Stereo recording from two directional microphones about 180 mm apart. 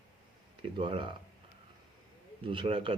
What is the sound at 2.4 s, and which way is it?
Speech, 30° right (ahead or behind).